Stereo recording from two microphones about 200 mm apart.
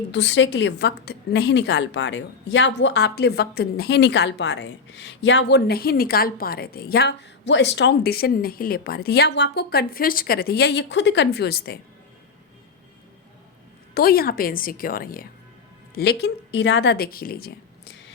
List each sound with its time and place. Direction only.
0.1 s a woman's voice: 60° left (ahead or behind)
13.9 s a woman's voice: 50° left (ahead or behind)